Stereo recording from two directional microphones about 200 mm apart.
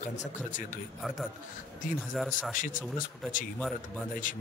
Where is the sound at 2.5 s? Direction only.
40° left (ahead or behind).